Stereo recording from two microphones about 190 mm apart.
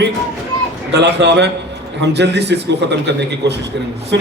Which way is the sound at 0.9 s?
65° right (ahead or behind).